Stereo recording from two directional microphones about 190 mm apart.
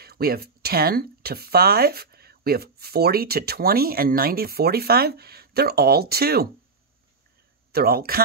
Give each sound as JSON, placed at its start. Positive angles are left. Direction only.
{"t": 0.0, "sound": "speech", "side_deg": -55}
{"t": 7.7, "sound": "speech", "side_deg": -55}